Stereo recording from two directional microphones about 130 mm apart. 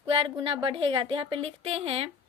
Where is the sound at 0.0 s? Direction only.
40° right (ahead or behind).